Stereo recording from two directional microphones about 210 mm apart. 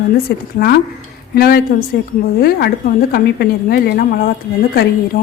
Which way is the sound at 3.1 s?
50° left (ahead or behind).